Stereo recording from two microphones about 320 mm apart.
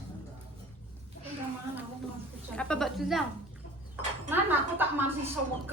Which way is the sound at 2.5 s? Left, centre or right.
Centre.